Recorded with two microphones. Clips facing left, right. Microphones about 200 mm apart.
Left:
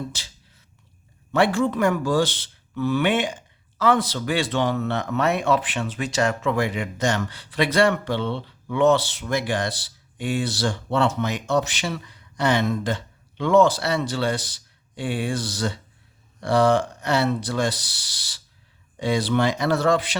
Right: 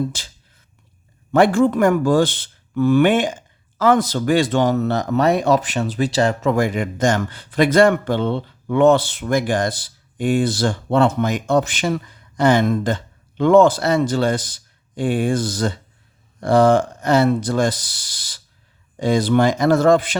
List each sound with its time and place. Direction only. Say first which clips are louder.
1.3 s a man's voice: right 6 dB; 50° right (ahead or behind)